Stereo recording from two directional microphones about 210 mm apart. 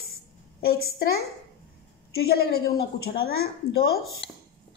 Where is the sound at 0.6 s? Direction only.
45° left (ahead or behind).